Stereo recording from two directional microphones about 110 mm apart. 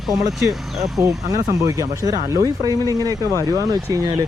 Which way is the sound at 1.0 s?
30° right (ahead or behind).